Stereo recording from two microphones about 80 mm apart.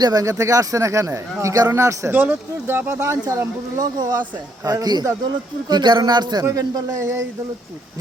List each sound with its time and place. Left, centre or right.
0.0 s speech: right
2.1 s speech: right
3.2 s speech: right
4.6 s speech: right
5.6 s a man's voice: right
6.5 s speech: right